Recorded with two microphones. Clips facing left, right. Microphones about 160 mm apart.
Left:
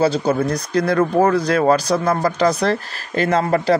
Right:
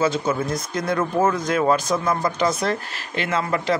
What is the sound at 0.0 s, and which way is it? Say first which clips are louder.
Speech: left 4 dB; 35° left (ahead or behind).